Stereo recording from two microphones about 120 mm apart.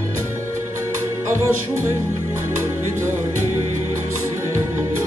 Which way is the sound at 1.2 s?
20° right (ahead or behind).